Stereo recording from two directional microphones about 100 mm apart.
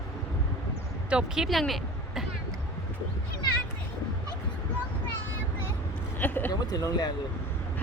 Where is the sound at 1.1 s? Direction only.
10° right (ahead or behind).